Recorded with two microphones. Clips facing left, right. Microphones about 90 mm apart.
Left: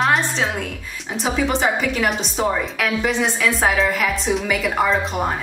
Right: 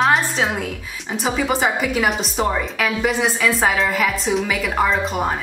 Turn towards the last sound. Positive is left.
turn(degrees=0)  # may be behind; listen again after turning